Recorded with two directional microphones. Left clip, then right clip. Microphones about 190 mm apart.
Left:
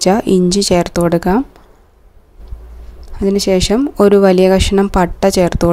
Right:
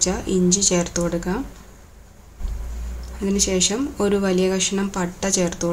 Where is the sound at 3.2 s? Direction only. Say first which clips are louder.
Left 8 dB; 50° left (ahead or behind).